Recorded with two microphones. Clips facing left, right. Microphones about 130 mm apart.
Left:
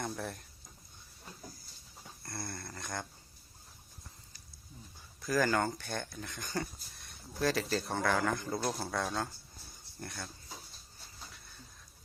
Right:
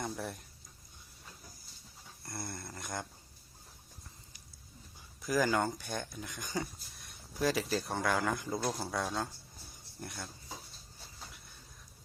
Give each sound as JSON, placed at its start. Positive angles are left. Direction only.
{"t": 0.0, "sound": "speech", "side_deg": -5}
{"t": 2.2, "sound": "speech", "side_deg": -15}
{"t": 5.2, "sound": "speech", "side_deg": -15}